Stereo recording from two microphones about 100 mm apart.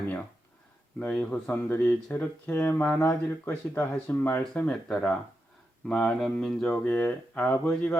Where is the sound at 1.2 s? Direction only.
20° left (ahead or behind).